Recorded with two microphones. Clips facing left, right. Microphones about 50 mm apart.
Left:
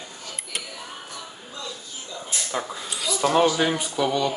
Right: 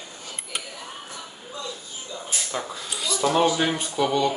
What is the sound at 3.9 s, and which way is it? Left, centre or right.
Speech, centre.